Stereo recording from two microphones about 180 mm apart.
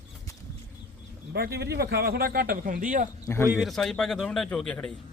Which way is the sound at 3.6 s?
Centre (ahead or behind).